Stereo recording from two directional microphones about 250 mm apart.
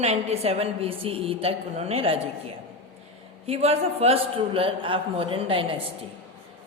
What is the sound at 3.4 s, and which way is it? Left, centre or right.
A woman's voice, right.